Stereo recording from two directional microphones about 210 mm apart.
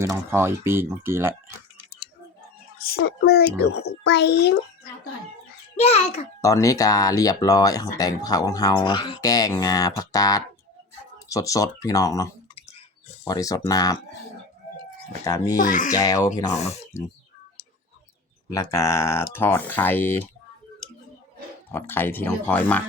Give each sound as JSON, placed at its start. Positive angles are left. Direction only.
{"t": 0.0, "sound": "speech", "side_deg": -10}
{"t": 2.9, "sound": "speech", "side_deg": 50}
{"t": 5.7, "sound": "a child's voice", "side_deg": 30}
{"t": 6.4, "sound": "speech", "side_deg": 15}
{"t": 15.2, "sound": "speech", "side_deg": 15}
{"t": 15.6, "sound": "speech", "side_deg": 40}
{"t": 15.9, "sound": "speech", "side_deg": 15}
{"t": 18.5, "sound": "speech", "side_deg": 15}
{"t": 21.7, "sound": "speech", "side_deg": 10}